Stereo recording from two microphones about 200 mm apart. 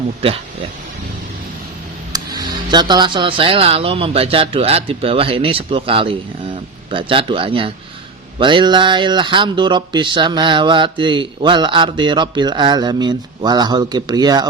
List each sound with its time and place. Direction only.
0.2 s speech: 30° right (ahead or behind)
2.1 s speech: 20° right (ahead or behind)